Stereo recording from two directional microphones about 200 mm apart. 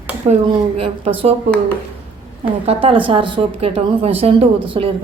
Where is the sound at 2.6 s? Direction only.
25° right (ahead or behind).